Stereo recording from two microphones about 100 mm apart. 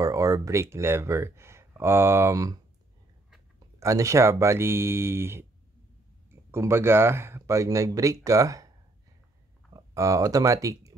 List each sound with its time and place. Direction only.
0.0 s speech: 30° right (ahead or behind)
3.8 s speech: 30° right (ahead or behind)
6.5 s speech: 25° right (ahead or behind)